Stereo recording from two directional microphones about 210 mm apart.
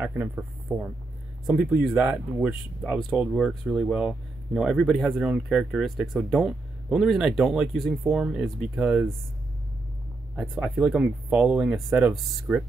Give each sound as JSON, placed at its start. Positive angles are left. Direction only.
{"t": 0.0, "sound": "speech", "side_deg": -10}
{"t": 10.3, "sound": "speech", "side_deg": -5}